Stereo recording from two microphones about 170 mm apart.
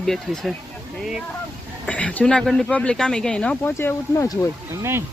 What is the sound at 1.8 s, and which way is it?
Speech, 5° left (ahead or behind).